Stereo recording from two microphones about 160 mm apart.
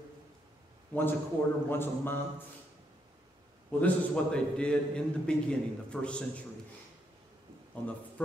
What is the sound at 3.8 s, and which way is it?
A man's voice, 5° left (ahead or behind).